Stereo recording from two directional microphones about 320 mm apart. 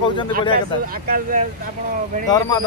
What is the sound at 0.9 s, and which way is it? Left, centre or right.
Speech, right.